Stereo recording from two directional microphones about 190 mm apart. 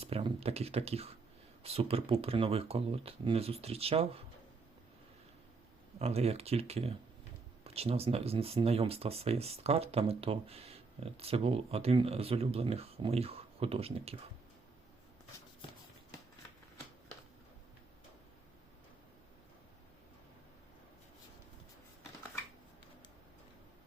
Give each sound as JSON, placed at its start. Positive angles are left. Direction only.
{"t": 0.0, "sound": "speech", "side_deg": -30}
{"t": 6.0, "sound": "speech", "side_deg": -35}